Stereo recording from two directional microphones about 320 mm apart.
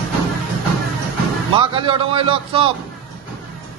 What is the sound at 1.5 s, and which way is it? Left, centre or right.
A man's voice, centre.